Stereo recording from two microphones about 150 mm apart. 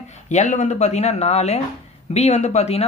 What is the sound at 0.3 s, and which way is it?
Speech, 55° left (ahead or behind).